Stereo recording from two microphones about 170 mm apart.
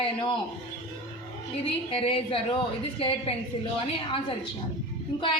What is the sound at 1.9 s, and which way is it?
A woman's voice, 30° left (ahead or behind).